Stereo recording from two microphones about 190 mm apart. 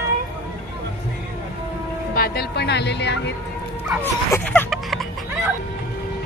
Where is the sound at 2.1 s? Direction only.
55° left (ahead or behind).